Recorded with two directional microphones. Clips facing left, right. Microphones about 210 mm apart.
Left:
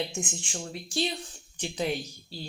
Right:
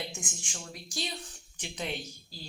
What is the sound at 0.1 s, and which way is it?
Speech, 30° left (ahead or behind).